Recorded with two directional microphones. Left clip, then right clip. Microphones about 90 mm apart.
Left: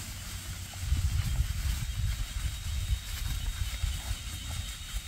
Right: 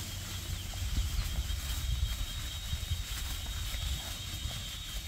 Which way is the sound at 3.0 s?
20° left (ahead or behind).